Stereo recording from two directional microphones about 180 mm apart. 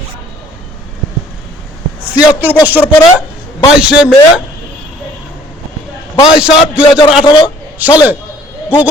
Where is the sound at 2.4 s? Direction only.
10° right (ahead or behind).